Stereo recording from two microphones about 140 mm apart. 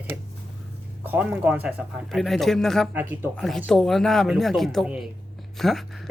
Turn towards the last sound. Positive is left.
turn(degrees=0)  # may be behind; listen again after turning